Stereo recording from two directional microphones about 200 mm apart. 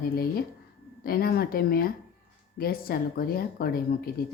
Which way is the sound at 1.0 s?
50° left (ahead or behind).